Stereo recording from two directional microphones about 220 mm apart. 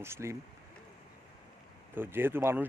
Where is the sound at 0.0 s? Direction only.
10° right (ahead or behind).